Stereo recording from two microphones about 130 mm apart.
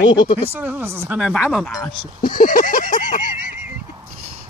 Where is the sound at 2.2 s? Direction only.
90° left.